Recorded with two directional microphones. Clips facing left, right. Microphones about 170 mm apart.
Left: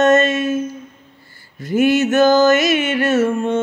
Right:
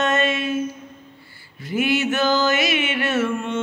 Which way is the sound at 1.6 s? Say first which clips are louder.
Left 7 dB; 45° left (ahead or behind).